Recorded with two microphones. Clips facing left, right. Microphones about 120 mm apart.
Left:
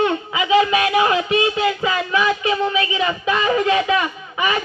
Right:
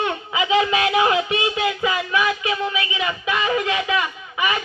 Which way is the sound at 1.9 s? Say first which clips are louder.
Left 2 dB; 30° left (ahead or behind).